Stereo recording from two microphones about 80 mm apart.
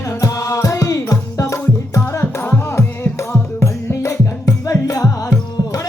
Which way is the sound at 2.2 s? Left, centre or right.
Left.